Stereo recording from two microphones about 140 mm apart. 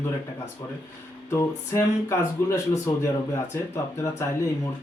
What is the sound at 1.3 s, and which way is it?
Speech, 20° left (ahead or behind).